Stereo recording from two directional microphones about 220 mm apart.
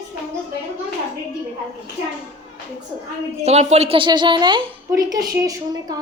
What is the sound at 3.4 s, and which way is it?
A woman's voice, 30° right (ahead or behind).